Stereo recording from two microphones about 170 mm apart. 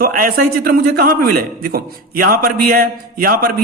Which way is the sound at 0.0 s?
60° right (ahead or behind).